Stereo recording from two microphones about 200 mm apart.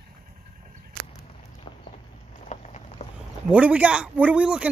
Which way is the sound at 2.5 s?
35° left (ahead or behind).